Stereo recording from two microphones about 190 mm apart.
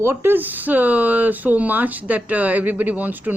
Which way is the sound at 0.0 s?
15° right (ahead or behind).